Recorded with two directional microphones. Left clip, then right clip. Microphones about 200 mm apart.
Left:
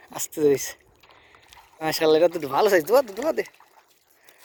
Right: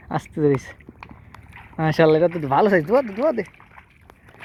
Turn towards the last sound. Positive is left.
turn(degrees=20)  # may be behind; listen again after turning